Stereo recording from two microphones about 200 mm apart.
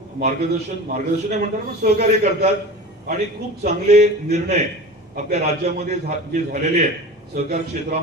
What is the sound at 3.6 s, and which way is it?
A man's voice, 35° right (ahead or behind).